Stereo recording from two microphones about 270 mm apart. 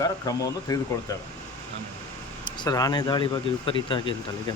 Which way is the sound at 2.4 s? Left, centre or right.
Centre.